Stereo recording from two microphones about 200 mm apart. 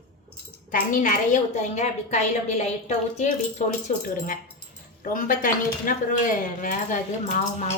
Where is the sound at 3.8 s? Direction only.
45° left (ahead or behind).